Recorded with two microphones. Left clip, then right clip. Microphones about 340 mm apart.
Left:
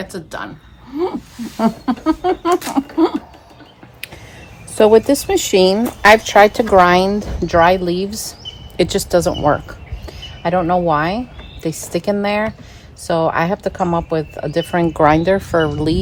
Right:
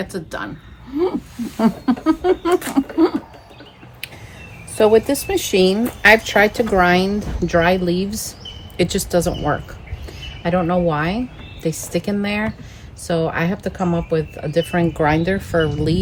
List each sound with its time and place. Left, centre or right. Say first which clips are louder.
0.0 s speech: even; centre
4.7 s speech: left 3 dB; left